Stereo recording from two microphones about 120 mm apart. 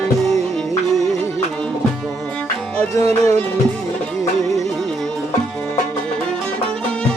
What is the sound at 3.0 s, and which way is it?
Music, 30° left (ahead or behind).